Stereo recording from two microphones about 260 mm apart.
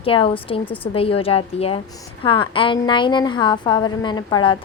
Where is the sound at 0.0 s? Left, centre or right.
Left.